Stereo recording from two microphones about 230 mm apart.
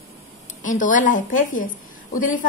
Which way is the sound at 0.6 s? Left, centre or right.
Left.